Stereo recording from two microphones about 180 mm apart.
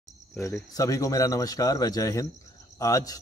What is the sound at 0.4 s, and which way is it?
A man's voice, 15° left (ahead or behind).